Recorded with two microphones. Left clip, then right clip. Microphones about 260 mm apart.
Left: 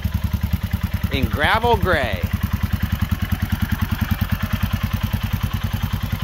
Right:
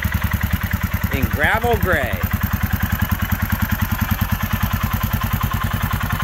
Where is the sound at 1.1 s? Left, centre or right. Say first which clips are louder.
Even; centre.